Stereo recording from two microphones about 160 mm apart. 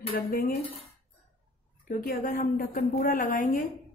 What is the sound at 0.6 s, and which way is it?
Cutlery, 40° left (ahead or behind).